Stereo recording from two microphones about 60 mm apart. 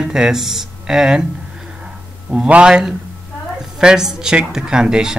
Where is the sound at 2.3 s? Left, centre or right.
Centre.